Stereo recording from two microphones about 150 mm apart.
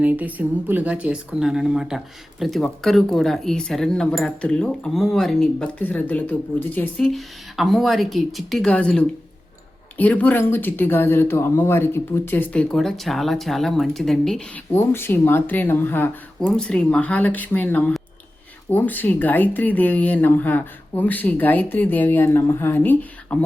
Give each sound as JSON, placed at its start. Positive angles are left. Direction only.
{"t": 0.0, "sound": "speech", "side_deg": -10}